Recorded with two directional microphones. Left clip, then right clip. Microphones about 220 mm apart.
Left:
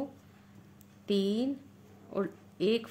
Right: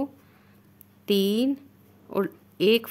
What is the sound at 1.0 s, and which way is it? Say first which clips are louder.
A woman's voice: right 7 dB; 50° right (ahead or behind).